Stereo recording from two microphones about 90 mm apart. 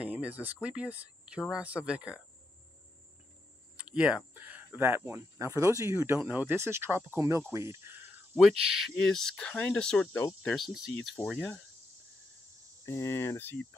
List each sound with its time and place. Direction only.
0.0 s speech: 15° right (ahead or behind)
3.7 s a sound: 15° right (ahead or behind)
4.3 s speech: 20° right (ahead or behind)
8.4 s speech: 5° right (ahead or behind)
8.9 s speech: 5° left (ahead or behind)
11.1 s speech: 10° left (ahead or behind)
12.8 s speech: 30° left (ahead or behind)